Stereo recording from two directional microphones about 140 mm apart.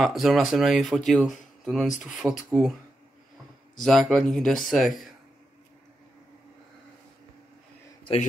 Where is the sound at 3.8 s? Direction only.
5° left (ahead or behind).